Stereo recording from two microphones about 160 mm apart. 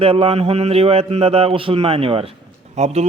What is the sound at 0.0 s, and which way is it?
A man's voice, 35° right (ahead or behind).